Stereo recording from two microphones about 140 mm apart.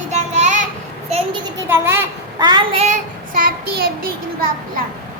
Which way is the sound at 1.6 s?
15° right (ahead or behind).